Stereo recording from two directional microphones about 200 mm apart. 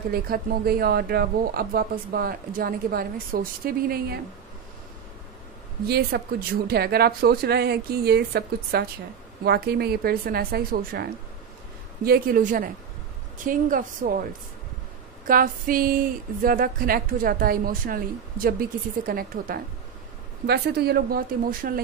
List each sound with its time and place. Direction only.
0.1 s a woman's voice: 50° right (ahead or behind)
5.9 s a woman's voice: 50° right (ahead or behind)
15.2 s a woman's voice: 45° right (ahead or behind)